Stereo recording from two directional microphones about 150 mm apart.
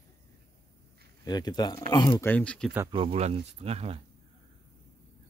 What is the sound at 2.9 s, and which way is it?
Speech, 40° right (ahead or behind).